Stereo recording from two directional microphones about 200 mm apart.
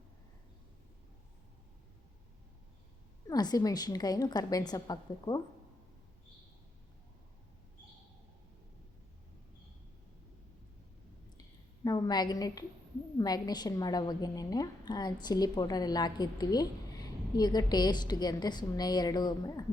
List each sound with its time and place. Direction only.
3.2 s a woman's voice: 20° left (ahead or behind)
11.3 s a sound: 20° left (ahead or behind)
13.1 s a woman's voice: 20° left (ahead or behind)